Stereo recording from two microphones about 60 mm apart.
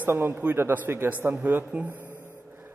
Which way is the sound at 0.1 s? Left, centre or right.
Right.